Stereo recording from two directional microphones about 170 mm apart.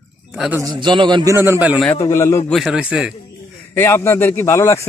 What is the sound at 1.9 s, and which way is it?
Speech, 20° left (ahead or behind).